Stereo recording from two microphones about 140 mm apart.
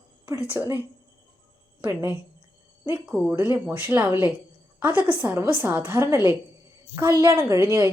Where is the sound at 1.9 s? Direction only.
10° right (ahead or behind).